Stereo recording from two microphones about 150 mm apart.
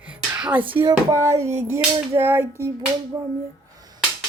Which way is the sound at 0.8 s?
20° right (ahead or behind).